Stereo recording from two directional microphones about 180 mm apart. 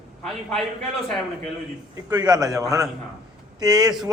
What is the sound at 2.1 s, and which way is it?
A man's voice, 20° right (ahead or behind).